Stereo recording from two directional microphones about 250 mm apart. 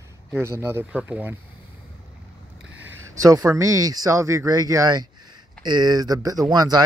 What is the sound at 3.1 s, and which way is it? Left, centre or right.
Speech, centre.